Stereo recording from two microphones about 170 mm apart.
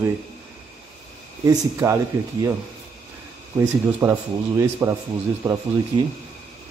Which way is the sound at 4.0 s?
15° right (ahead or behind).